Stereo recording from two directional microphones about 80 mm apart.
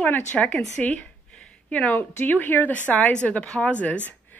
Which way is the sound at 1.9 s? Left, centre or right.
Left.